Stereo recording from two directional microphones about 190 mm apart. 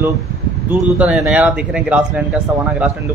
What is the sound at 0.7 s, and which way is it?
Speech, 5° right (ahead or behind).